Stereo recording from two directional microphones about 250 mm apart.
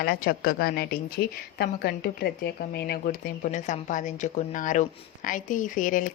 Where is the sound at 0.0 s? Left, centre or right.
Left.